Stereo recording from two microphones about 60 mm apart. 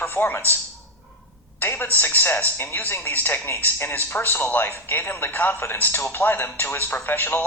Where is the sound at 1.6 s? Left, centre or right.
Left.